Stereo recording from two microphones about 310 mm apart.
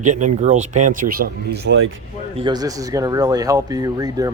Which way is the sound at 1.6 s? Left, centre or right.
Right.